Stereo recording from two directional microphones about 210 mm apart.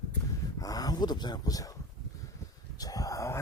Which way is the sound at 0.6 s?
15° left (ahead or behind).